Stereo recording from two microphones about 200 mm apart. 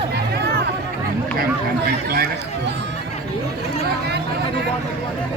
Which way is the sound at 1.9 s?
50° right (ahead or behind).